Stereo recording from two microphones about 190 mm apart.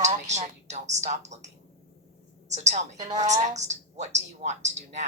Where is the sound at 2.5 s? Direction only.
35° right (ahead or behind).